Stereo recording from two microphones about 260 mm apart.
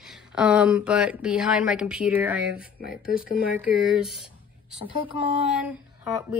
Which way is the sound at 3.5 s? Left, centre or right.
Centre.